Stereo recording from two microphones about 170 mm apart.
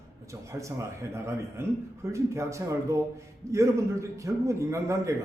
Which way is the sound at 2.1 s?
15° right (ahead or behind).